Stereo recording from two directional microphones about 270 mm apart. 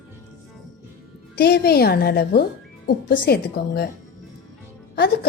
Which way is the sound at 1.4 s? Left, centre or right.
Left.